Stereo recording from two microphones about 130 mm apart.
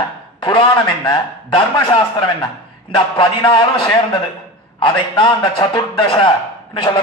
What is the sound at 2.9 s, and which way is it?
Speech, 40° left (ahead or behind).